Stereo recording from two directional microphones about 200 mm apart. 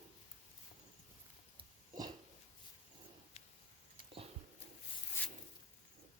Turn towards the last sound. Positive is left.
turn(degrees=10)  # may be behind; listen again after turning